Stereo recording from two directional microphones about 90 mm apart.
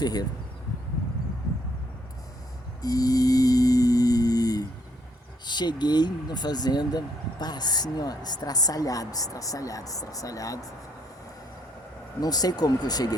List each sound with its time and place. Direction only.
0.0 s speech: 45° left (ahead or behind)
2.8 s cattle: 45° left (ahead or behind)
5.5 s speech: 55° left (ahead or behind); by 10.6 s 40° left (ahead or behind)
12.2 s speech: 45° left (ahead or behind)